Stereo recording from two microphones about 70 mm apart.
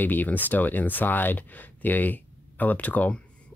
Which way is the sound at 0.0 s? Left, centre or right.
Left.